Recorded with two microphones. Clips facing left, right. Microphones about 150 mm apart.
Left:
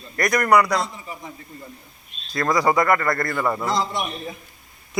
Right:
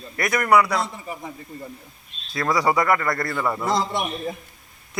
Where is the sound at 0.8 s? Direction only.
55° right (ahead or behind).